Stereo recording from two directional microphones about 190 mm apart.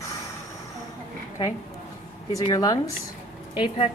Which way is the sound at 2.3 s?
20° left (ahead or behind).